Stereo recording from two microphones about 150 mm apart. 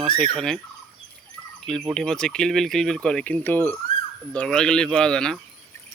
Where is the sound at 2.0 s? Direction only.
5° left (ahead or behind).